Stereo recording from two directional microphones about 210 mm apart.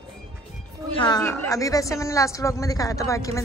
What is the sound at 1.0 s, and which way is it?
A woman's voice, 15° left (ahead or behind).